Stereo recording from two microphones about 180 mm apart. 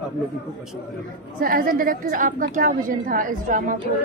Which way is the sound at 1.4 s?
50° right (ahead or behind).